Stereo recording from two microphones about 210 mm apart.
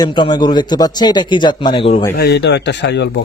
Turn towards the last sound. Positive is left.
turn(degrees=55)  # may be behind; listen again after turning